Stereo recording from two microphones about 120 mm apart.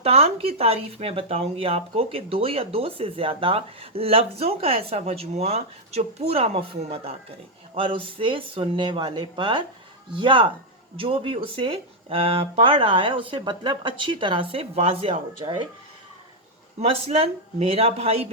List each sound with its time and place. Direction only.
0.0 s speech: 55° right (ahead or behind)
16.8 s speech: 55° right (ahead or behind)